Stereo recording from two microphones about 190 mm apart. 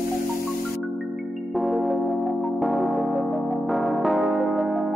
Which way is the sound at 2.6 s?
Centre (ahead or behind).